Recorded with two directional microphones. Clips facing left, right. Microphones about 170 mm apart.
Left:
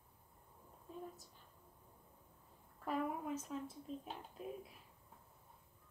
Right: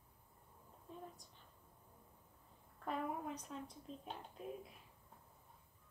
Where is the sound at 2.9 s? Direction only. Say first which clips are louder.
Left 2 dB; 5° left (ahead or behind).